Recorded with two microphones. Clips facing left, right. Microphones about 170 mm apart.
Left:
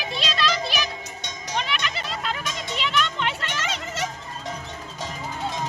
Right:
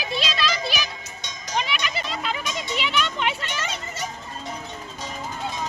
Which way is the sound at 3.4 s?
90° left.